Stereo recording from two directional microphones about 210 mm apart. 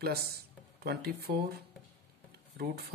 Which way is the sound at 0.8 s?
50° right (ahead or behind).